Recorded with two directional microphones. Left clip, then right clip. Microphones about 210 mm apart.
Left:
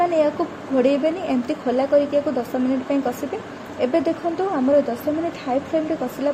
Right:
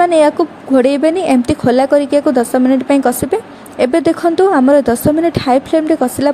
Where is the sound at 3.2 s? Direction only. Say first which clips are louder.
Right 11 dB; 40° right (ahead or behind).